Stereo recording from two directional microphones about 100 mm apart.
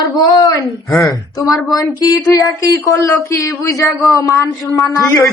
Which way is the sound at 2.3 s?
30° left (ahead or behind).